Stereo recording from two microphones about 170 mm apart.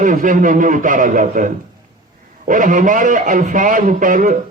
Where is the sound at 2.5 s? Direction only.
50° right (ahead or behind).